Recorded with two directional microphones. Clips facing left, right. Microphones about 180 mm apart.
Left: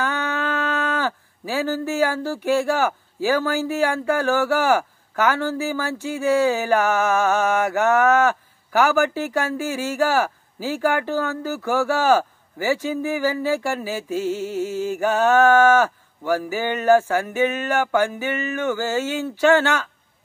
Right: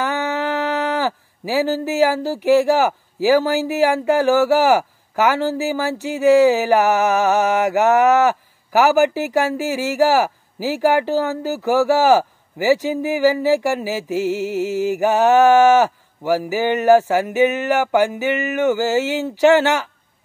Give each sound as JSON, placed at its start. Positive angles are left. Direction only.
{"t": 0.0, "sound": "a sound", "side_deg": -20}
{"t": 2.4, "sound": "mantra", "side_deg": -15}
{"t": 14.1, "sound": "music", "side_deg": -75}
{"t": 15.0, "sound": "music", "side_deg": -15}
{"t": 16.3, "sound": "mantra", "side_deg": -10}
{"t": 17.1, "sound": "music", "side_deg": -15}